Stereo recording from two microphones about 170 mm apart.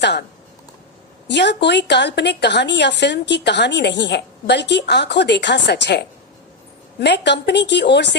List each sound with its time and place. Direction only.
0.0 s speech: 85° left
1.3 s a woman's voice: 90° left